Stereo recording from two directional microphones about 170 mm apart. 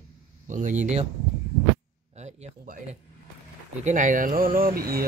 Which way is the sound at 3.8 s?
50° right (ahead or behind).